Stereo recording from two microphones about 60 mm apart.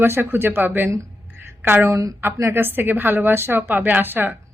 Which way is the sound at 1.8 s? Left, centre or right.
Right.